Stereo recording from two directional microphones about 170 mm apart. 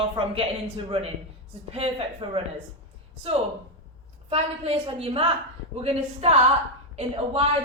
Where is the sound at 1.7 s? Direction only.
35° right (ahead or behind).